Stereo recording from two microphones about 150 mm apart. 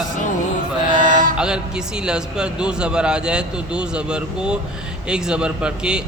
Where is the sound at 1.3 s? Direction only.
5° right (ahead or behind).